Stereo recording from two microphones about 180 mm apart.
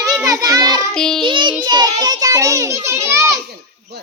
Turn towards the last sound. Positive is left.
turn(degrees=-15)  # may be behind; listen again after turning